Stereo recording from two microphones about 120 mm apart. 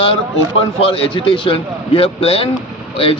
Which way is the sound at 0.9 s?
50° left (ahead or behind).